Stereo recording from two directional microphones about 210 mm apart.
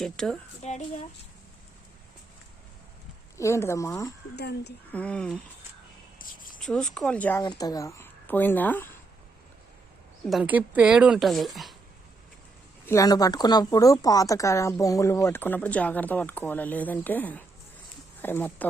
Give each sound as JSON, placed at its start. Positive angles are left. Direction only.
{"t": 0.0, "sound": "speech", "side_deg": 0}
{"t": 0.6, "sound": "speech", "side_deg": 30}
{"t": 3.3, "sound": "speech", "side_deg": 15}
{"t": 4.4, "sound": "speech", "side_deg": 55}
{"t": 4.9, "sound": "speech", "side_deg": 5}
{"t": 6.1, "sound": "a sound", "side_deg": 40}
{"t": 6.6, "sound": "a woman's voice", "side_deg": 5}
{"t": 10.2, "sound": "speech", "side_deg": -5}
{"t": 12.8, "sound": "speech", "side_deg": 15}